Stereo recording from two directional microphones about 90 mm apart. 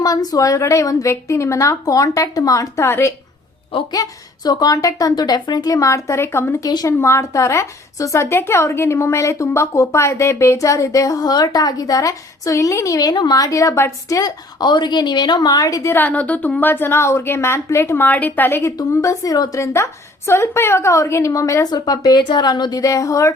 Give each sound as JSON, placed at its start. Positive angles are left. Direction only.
{"t": 0.0, "sound": "a woman's voice", "side_deg": 45}
{"t": 2.8, "sound": "a woman's voice", "side_deg": 25}
{"t": 3.9, "sound": "a woman's voice", "side_deg": 45}
{"t": 6.6, "sound": "a woman's voice", "side_deg": 40}
{"t": 14.2, "sound": "a woman's voice", "side_deg": 50}
{"t": 15.9, "sound": "a woman's voice", "side_deg": 20}
{"t": 18.8, "sound": "a woman's voice", "side_deg": 40}
{"t": 22.8, "sound": "a woman's voice", "side_deg": 40}